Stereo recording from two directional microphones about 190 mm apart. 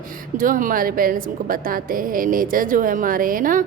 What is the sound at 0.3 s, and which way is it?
A woman's voice, 45° right (ahead or behind).